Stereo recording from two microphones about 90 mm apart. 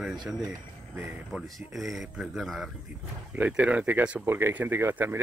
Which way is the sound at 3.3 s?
15° right (ahead or behind).